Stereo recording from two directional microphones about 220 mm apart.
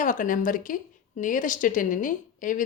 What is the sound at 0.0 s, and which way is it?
A woman's voice, 35° left (ahead or behind).